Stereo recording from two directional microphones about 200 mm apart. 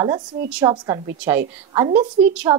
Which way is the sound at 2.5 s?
20° right (ahead or behind).